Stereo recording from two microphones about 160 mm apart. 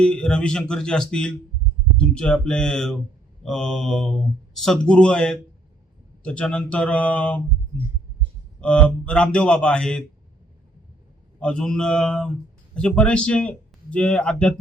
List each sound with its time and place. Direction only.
0.0 s a man's voice: 5° left (ahead or behind)
8.6 s a man's voice: 5° left (ahead or behind)
11.3 s speech: 5° left (ahead or behind)